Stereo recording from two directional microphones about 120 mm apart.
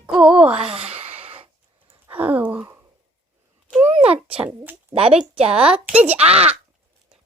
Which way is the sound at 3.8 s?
70° right (ahead or behind).